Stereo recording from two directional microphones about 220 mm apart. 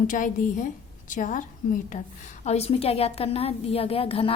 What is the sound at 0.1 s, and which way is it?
A woman's voice, 35° left (ahead or behind).